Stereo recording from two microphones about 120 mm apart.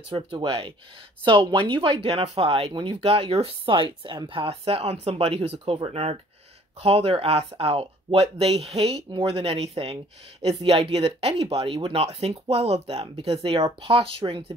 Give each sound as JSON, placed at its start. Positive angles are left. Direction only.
{"t": 0.1, "sound": "speech", "side_deg": -45}
{"t": 6.8, "sound": "speech", "side_deg": -55}